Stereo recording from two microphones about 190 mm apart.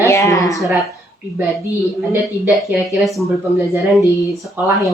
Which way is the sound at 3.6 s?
15° right (ahead or behind).